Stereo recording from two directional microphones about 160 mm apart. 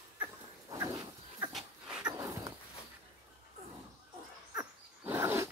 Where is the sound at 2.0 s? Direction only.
25° right (ahead or behind).